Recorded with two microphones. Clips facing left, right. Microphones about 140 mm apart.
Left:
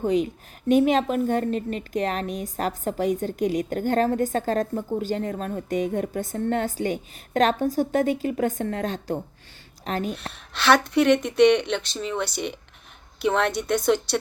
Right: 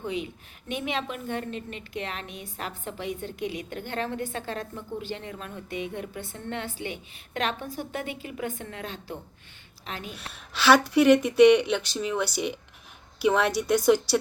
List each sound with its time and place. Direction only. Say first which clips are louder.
0.0 s a woman's voice: left 9 dB; 40° left (ahead or behind)
10.5 s speech: even; 5° right (ahead or behind)